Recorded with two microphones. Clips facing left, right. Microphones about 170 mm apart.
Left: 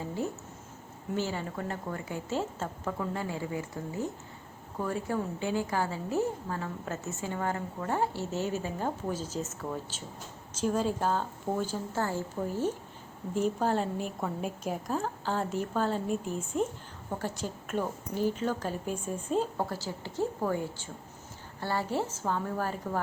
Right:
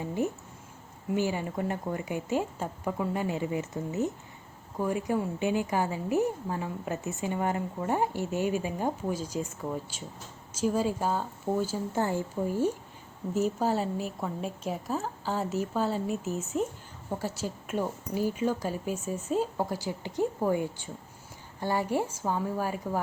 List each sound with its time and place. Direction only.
0.0 s a woman's voice: 15° right (ahead or behind)